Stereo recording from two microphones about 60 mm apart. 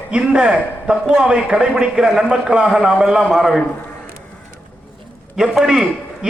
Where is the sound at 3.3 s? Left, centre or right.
Centre.